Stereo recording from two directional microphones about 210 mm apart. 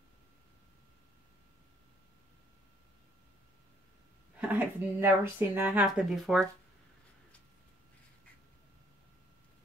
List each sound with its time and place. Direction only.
4.4 s speech: 10° right (ahead or behind)